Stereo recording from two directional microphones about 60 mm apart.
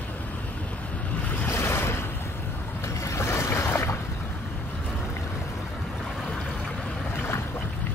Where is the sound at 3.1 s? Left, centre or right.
Left.